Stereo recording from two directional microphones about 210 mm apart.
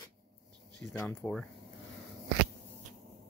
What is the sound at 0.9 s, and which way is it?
Speech, 15° left (ahead or behind).